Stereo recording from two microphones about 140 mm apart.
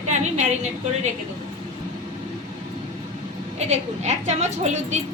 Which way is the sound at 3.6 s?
50° right (ahead or behind).